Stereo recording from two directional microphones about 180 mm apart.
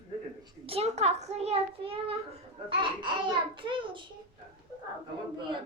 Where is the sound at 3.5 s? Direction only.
30° right (ahead or behind).